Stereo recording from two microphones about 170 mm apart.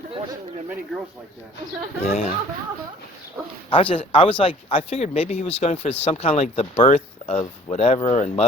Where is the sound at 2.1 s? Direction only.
35° left (ahead or behind).